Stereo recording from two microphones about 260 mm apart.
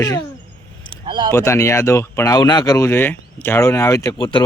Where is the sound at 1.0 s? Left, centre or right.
Centre.